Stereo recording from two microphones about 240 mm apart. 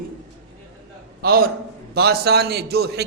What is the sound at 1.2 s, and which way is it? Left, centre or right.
A man's voice, right.